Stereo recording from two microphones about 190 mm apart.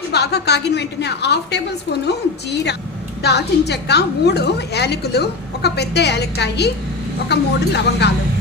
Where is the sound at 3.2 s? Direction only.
60° left (ahead or behind).